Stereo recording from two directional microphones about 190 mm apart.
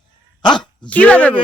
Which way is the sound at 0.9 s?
10° left (ahead or behind).